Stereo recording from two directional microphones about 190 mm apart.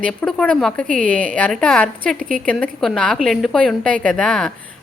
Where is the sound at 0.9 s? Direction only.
45° right (ahead or behind).